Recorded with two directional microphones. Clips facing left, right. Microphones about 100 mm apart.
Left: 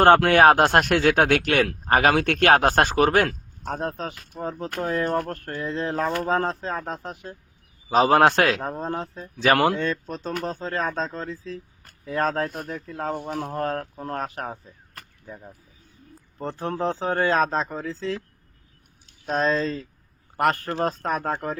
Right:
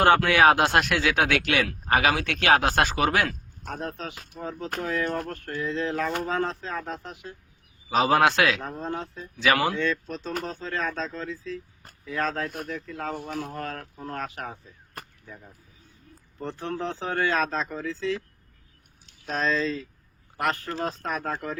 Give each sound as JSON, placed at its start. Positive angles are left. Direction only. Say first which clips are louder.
{"t": 0.0, "sound": "speech", "louder": "left 4 dB", "side_deg": 50}
{"t": 16.4, "sound": "speech", "louder": "left 4 dB", "side_deg": 40}
{"t": 19.2, "sound": "a man's voice", "louder": "left 3 dB", "side_deg": 30}